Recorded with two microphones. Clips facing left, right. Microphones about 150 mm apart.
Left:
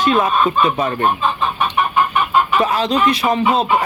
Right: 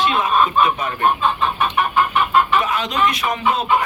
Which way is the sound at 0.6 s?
35° left (ahead or behind).